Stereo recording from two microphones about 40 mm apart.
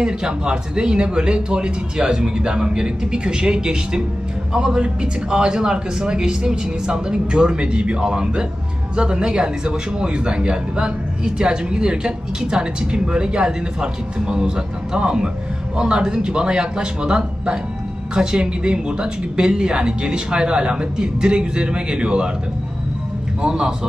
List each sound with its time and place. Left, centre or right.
0.0 s speech: right
23.4 s speech: right